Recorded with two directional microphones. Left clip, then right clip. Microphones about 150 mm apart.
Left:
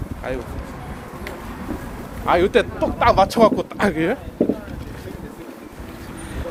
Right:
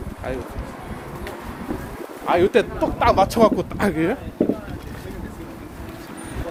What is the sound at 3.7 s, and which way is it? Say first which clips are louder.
Speech: left 1 dB; 10° right (ahead or behind).